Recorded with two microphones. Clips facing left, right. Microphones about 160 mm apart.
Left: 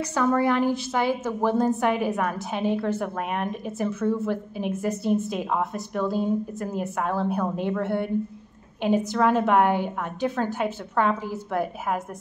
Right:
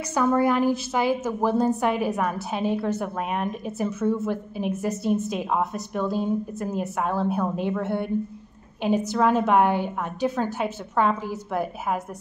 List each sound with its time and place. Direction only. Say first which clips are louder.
0.0 s a woman's voice: right 1 dB; 10° right (ahead or behind)